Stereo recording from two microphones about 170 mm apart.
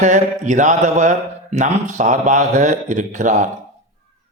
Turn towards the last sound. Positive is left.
turn(degrees=-45)  # may be behind; listen again after turning